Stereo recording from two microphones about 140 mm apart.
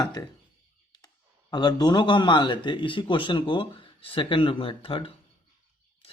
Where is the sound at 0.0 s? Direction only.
25° left (ahead or behind).